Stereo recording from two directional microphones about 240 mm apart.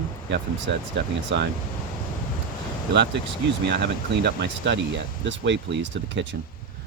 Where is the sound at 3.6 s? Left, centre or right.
Right.